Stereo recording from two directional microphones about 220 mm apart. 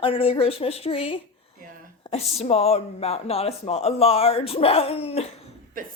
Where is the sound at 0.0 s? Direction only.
25° left (ahead or behind).